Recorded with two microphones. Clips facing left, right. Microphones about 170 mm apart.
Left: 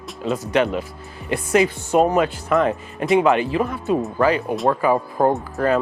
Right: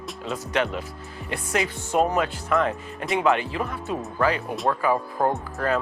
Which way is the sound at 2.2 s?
15° left (ahead or behind).